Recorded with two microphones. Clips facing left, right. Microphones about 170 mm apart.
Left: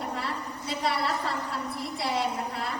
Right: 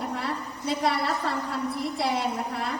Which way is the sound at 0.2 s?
55° right (ahead or behind).